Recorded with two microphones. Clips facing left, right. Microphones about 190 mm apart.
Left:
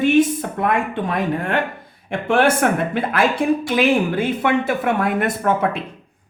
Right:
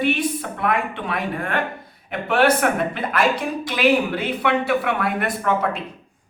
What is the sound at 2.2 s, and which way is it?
A woman's voice, 50° left (ahead or behind).